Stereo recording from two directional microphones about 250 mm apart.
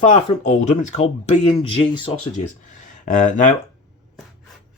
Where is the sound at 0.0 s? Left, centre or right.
Left.